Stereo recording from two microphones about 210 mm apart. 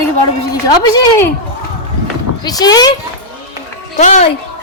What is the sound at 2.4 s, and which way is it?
Speech, 20° left (ahead or behind).